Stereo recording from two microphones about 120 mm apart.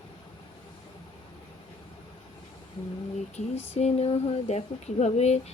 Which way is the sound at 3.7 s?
60° left (ahead or behind).